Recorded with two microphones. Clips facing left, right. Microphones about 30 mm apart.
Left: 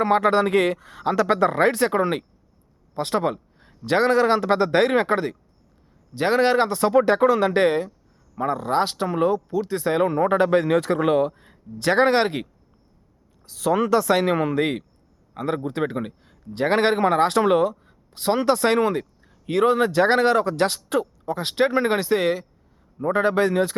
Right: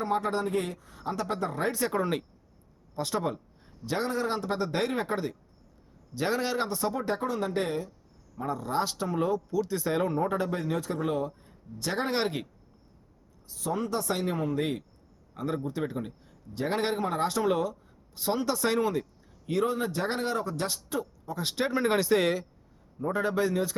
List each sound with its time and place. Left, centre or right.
0.0 s speech: left
1.9 s speech: left
2.9 s a sound: left
3.8 s speech: left
8.4 s speech: left
13.4 s speech: left
16.6 s speech: left
19.5 s speech: left
21.3 s speech: left; by 22.4 s centre
23.1 s speech: left